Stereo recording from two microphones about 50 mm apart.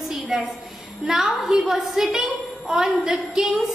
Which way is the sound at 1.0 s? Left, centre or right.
Centre.